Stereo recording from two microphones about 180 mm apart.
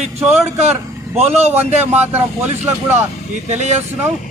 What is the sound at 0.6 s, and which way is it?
Speech, 40° right (ahead or behind).